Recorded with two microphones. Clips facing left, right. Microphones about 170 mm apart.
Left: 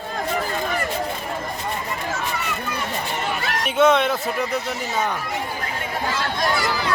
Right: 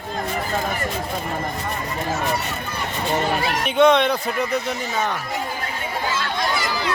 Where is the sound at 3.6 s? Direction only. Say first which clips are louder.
Right 1 dB; centre (ahead or behind).